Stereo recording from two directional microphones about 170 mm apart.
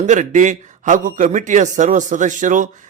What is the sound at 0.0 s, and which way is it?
Speech, 45° right (ahead or behind).